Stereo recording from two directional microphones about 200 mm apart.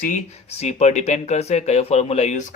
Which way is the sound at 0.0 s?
35° left (ahead or behind).